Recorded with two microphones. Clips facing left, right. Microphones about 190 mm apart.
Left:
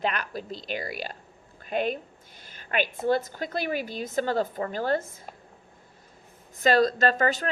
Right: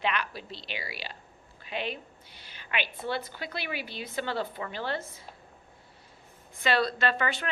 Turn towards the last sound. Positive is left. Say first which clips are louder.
# left 5 dB
turn(degrees=40)  # may be behind; listen again after turning